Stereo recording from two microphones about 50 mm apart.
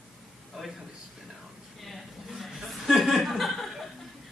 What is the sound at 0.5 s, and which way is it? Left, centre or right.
Speech, centre.